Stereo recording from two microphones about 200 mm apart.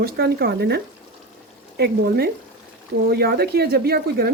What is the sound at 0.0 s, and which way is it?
Speech, 50° right (ahead or behind).